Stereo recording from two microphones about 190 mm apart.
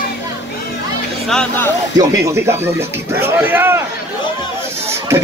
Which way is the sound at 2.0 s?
15° right (ahead or behind).